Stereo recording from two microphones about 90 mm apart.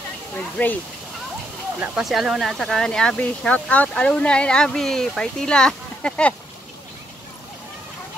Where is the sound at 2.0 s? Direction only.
5° right (ahead or behind); by 6.3 s 10° left (ahead or behind).